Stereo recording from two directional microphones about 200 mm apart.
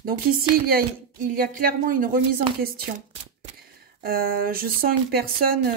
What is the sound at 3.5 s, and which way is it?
Speech, 50° right (ahead or behind).